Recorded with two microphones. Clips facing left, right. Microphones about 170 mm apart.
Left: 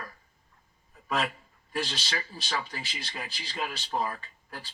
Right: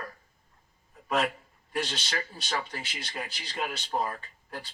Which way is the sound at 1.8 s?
50° right (ahead or behind).